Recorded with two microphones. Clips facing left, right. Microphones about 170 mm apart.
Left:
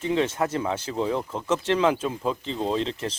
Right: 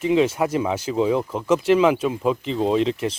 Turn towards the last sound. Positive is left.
turn(degrees=-10)  # may be behind; listen again after turning